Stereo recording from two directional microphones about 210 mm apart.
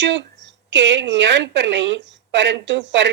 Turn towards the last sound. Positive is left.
turn(degrees=-60)  # may be behind; listen again after turning